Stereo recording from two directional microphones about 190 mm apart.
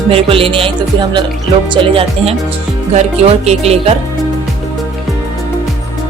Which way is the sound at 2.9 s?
35° right (ahead or behind).